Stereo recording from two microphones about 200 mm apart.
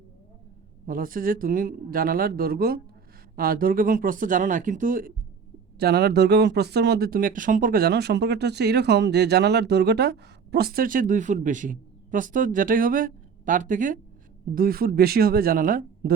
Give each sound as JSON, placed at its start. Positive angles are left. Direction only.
{"t": 0.9, "sound": "speech", "side_deg": -45}
{"t": 5.8, "sound": "speech", "side_deg": -55}